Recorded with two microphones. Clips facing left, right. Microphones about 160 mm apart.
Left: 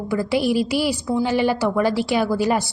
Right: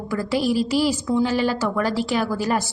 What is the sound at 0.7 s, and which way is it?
A woman's voice, 10° left (ahead or behind).